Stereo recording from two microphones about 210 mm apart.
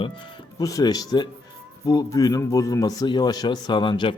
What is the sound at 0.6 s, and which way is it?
A man's voice, 15° left (ahead or behind).